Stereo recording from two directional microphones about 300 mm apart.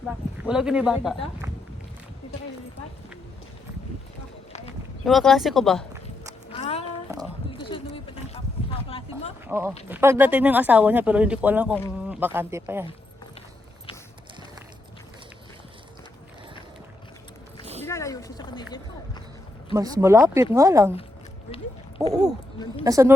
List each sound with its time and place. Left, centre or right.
0.0 s speech: centre
5.0 s speech: centre
6.5 s a sound: centre
9.5 s speech: centre
17.8 s a sound: centre
19.7 s speech: centre
22.1 s speech: centre